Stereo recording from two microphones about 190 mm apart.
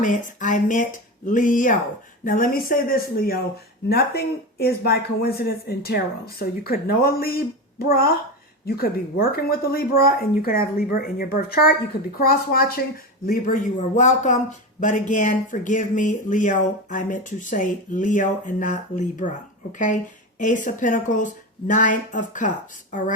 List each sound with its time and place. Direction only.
0.0 s speech: 40° left (ahead or behind)
20.4 s speech: 45° left (ahead or behind)